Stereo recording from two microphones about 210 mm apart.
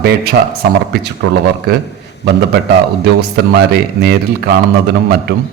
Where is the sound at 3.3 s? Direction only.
50° right (ahead or behind).